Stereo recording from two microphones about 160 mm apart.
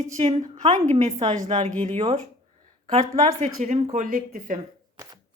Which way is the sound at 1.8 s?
45° right (ahead or behind).